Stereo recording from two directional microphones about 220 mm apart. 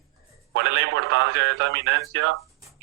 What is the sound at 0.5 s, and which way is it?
Speech, 55° right (ahead or behind).